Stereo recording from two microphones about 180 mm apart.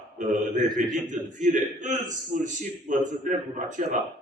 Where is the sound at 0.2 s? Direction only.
45° right (ahead or behind).